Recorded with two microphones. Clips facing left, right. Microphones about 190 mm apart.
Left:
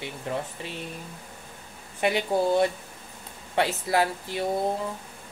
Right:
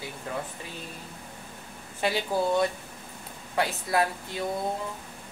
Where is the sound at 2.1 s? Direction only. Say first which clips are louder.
Left 3 dB; 25° left (ahead or behind).